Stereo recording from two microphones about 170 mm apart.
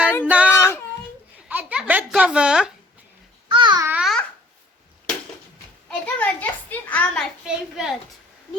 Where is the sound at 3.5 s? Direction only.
30° right (ahead or behind).